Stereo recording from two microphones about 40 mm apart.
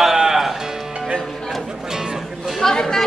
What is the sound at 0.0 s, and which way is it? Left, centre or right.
Music, centre.